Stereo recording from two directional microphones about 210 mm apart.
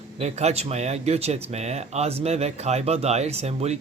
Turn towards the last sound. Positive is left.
turn(degrees=-30)  # may be behind; listen again after turning